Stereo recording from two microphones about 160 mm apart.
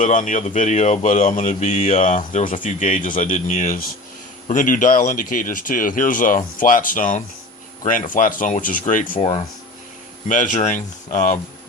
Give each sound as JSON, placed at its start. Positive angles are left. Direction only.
{"t": 0.0, "sound": "speech", "side_deg": 55}
{"t": 9.1, "sound": "speech", "side_deg": 40}
{"t": 10.2, "sound": "speech", "side_deg": 50}